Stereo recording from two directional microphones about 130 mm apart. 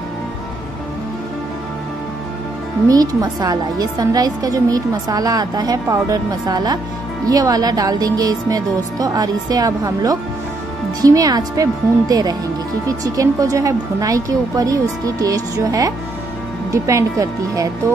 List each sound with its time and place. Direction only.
2.9 s a woman's voice: 30° right (ahead or behind)